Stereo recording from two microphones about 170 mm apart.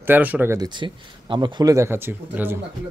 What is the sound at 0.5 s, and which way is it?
Speech, 25° right (ahead or behind).